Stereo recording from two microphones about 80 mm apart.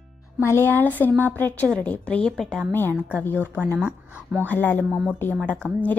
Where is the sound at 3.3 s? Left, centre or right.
Left.